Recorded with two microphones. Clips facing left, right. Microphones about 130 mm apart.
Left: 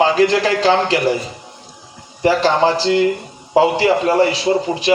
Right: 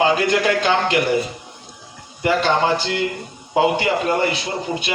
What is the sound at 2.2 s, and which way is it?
A man's voice, 35° left (ahead or behind).